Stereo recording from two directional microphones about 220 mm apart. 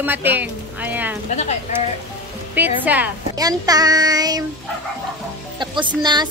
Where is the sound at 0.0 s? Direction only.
10° right (ahead or behind).